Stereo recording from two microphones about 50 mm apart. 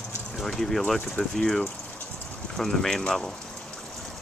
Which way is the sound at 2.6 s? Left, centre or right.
Centre.